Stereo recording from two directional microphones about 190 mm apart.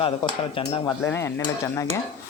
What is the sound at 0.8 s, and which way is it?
Cutlery, 10° left (ahead or behind).